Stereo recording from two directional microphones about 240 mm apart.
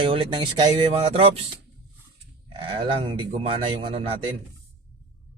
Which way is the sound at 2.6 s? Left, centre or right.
Right.